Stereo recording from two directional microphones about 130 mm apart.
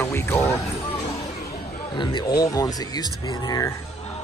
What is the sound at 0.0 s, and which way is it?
Music, 15° left (ahead or behind).